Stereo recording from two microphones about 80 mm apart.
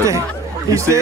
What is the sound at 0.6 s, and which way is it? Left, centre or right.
Speech, right.